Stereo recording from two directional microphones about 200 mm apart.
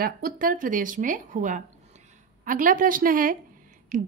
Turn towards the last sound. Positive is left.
turn(degrees=-40)  # may be behind; listen again after turning